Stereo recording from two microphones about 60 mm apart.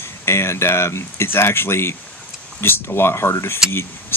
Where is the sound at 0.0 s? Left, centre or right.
Left.